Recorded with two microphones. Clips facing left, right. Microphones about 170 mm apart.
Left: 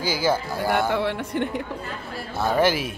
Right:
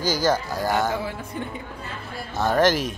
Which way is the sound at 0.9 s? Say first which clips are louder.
Left 5 dB; 75° left (ahead or behind).